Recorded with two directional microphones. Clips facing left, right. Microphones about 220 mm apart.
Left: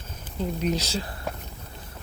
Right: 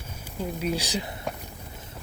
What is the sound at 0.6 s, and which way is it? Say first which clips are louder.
Speech: left 1 dB; 10° right (ahead or behind).